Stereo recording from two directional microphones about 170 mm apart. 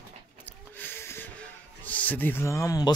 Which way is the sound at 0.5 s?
10° left (ahead or behind).